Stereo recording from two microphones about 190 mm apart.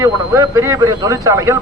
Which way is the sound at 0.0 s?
15° right (ahead or behind).